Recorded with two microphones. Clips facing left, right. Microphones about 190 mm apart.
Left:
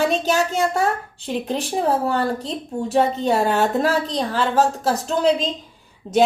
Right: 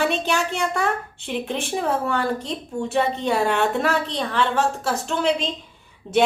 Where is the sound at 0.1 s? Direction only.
35° left (ahead or behind).